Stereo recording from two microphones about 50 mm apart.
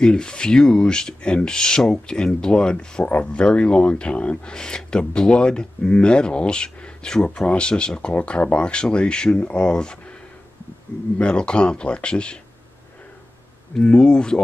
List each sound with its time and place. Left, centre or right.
0.0 s speech: centre
11.1 s speech: left
13.7 s speech: centre